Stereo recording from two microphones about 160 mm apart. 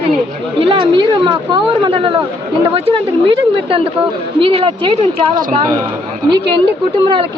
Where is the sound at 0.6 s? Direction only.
30° right (ahead or behind).